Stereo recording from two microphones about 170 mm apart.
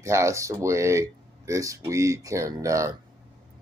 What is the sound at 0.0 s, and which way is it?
Speech, 15° right (ahead or behind).